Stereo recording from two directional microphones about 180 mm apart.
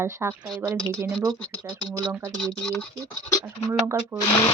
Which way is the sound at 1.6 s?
20° right (ahead or behind).